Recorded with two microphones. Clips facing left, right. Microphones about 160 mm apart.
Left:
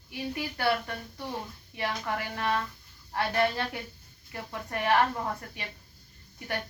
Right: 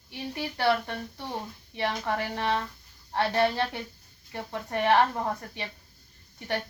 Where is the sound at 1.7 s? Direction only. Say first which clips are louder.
Right 3 dB; 25° right (ahead or behind).